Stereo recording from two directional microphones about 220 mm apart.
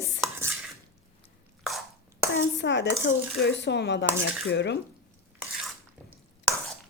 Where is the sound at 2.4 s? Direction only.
55° left (ahead or behind).